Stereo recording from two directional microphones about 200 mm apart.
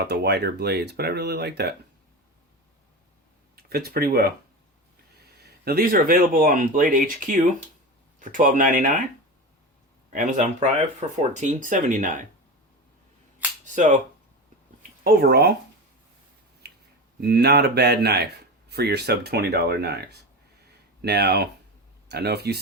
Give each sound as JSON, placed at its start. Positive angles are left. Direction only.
{"t": 0.0, "sound": "speech", "side_deg": -55}
{"t": 3.5, "sound": "speech", "side_deg": -50}
{"t": 5.4, "sound": "speech", "side_deg": -50}
{"t": 10.1, "sound": "speech", "side_deg": -40}
{"t": 13.7, "sound": "speech", "side_deg": -40}
{"t": 15.0, "sound": "speech", "side_deg": -50}
{"t": 16.6, "sound": "finger snapping", "side_deg": -55}
{"t": 17.2, "sound": "speech", "side_deg": -55}